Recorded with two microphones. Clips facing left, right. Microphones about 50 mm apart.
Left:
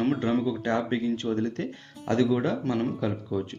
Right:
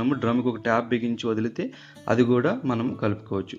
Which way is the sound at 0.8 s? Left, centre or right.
Right.